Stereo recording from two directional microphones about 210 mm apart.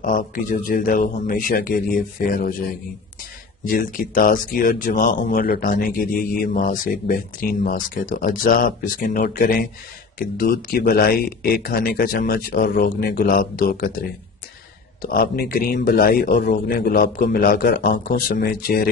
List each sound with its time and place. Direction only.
0.0 s speech: 40° left (ahead or behind)